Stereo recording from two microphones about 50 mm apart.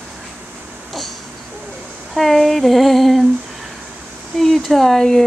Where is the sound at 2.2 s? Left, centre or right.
Centre.